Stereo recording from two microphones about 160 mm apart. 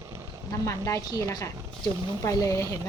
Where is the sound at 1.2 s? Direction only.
20° left (ahead or behind).